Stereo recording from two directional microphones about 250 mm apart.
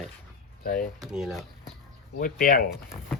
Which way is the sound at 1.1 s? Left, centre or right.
Centre.